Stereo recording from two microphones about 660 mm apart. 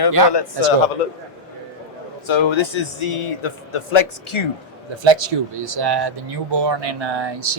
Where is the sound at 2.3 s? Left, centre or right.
Left.